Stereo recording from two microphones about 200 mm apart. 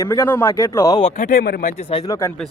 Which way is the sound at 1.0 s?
40° left (ahead or behind).